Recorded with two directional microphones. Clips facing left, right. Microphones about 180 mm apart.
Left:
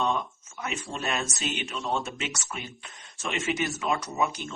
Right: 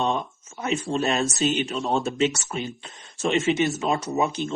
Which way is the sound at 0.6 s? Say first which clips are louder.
Right 9 dB; 30° right (ahead or behind).